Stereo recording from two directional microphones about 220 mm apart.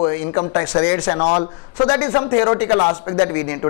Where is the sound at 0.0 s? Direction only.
20° left (ahead or behind).